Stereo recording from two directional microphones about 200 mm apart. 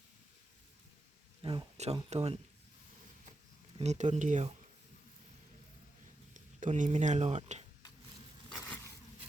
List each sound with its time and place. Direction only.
1.4 s speech: 25° right (ahead or behind)
3.8 s speech: 35° right (ahead or behind)
6.3 s speech: 40° right (ahead or behind)